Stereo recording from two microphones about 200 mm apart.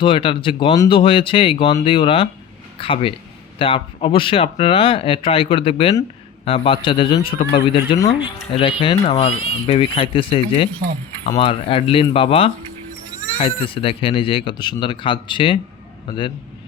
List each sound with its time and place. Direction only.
0.0 s a man's voice: 25° left (ahead or behind)